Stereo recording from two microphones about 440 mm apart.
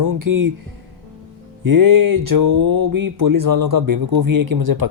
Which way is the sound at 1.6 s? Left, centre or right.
Right.